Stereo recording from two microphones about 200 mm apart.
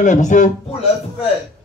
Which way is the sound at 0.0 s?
40° left (ahead or behind).